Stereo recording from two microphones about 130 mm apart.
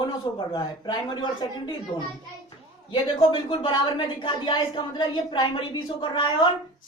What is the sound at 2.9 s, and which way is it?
Speech, 40° left (ahead or behind).